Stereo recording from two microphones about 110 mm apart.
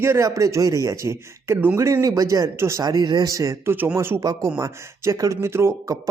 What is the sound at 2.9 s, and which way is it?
Speech, 40° right (ahead or behind).